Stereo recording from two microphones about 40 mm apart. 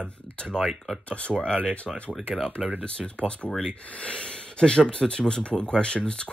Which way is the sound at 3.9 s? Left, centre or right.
Left.